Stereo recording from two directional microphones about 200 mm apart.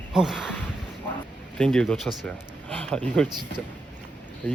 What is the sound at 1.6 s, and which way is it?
Speech, 5° left (ahead or behind).